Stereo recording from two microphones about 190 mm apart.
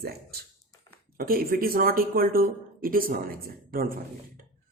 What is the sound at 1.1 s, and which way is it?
Speech, 50° right (ahead or behind).